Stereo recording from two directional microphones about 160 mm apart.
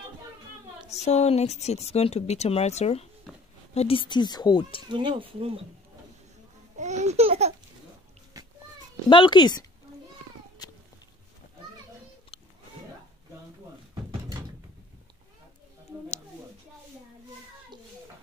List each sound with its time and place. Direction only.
0.8 s a woman's voice: 45° left (ahead or behind)
4.8 s speech: 30° right (ahead or behind)
6.8 s speech: 45° right (ahead or behind)
8.3 s children playing: 20° right (ahead or behind)
9.1 s speech: 30° left (ahead or behind)
10.6 s cat: 25° left (ahead or behind)